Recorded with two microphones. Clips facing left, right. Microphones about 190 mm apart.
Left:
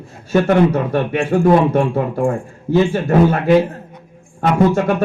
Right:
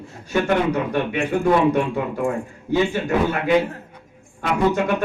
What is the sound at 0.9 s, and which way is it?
A man's voice, 45° left (ahead or behind).